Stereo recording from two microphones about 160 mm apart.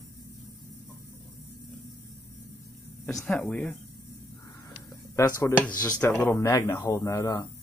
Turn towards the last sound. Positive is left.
turn(degrees=20)  # may be behind; listen again after turning